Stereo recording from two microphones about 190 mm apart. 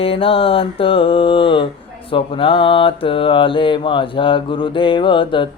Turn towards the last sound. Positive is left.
turn(degrees=25)  # may be behind; listen again after turning